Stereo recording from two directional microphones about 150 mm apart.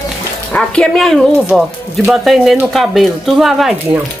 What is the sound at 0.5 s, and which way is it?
Speech, 5° left (ahead or behind).